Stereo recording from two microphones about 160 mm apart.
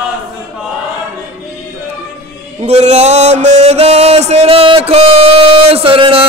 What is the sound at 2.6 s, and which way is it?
Mantra, 45° right (ahead or behind).